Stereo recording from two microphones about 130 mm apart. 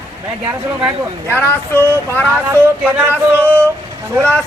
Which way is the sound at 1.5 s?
15° left (ahead or behind).